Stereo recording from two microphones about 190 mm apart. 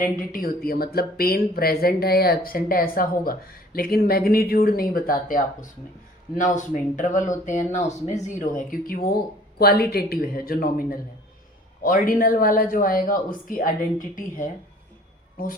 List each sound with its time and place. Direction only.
0.0 s speech: 45° left (ahead or behind)
6.3 s speech: 40° left (ahead or behind)